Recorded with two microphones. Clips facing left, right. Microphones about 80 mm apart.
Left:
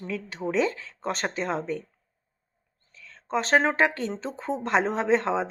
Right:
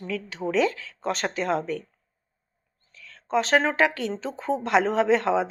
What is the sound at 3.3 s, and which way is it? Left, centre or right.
A woman's voice, left.